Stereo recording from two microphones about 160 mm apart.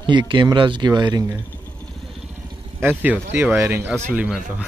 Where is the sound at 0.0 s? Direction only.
30° right (ahead or behind).